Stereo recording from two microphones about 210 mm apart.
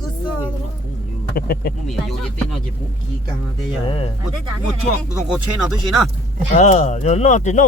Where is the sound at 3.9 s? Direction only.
30° left (ahead or behind).